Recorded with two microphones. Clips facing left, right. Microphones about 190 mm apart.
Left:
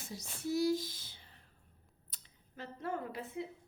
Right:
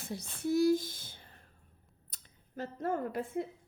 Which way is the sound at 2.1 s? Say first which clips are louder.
Right 3 dB; 45° right (ahead or behind).